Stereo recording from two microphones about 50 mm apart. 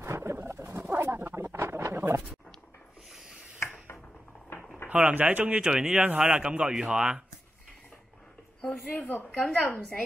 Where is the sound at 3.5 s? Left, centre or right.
Left.